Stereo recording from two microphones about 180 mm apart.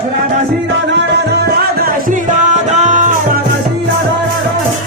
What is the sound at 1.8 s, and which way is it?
Music, 50° right (ahead or behind).